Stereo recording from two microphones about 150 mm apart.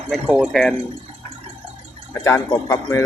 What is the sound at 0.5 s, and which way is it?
Speech, 5° left (ahead or behind).